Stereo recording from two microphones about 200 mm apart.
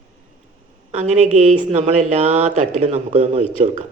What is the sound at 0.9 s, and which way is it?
A woman's voice, 35° right (ahead or behind).